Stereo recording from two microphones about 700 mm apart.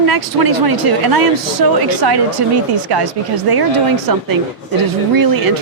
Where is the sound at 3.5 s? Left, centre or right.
Right.